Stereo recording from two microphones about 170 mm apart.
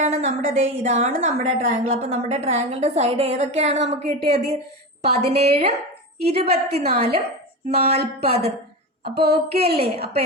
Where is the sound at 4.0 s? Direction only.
40° right (ahead or behind).